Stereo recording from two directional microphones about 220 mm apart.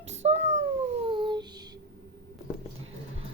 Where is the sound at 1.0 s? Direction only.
20° right (ahead or behind).